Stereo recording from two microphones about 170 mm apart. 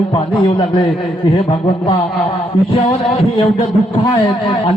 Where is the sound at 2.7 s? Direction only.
30° left (ahead or behind).